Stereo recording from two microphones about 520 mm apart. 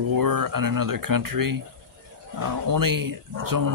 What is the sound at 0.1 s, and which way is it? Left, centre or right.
Speech, right.